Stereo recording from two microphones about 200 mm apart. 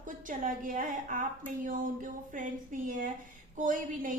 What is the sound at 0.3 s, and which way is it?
A woman's voice, 40° right (ahead or behind).